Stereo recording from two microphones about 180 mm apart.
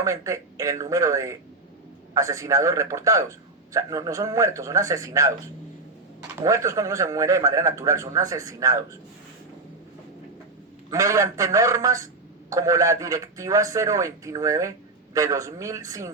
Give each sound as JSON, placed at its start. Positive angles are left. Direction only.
{"t": 0.0, "sound": "a man's voice", "side_deg": -15}
{"t": 6.4, "sound": "a man's voice", "side_deg": -15}
{"t": 10.8, "sound": "a man's voice", "side_deg": -20}